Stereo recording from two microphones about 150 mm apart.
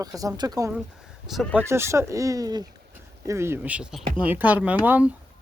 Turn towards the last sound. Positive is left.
turn(degrees=-10)  # may be behind; listen again after turning